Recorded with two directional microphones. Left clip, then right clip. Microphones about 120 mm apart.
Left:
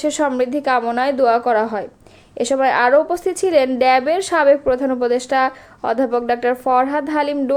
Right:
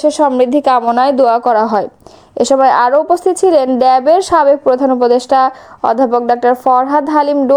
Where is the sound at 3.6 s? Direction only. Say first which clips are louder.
Even; 50° right (ahead or behind).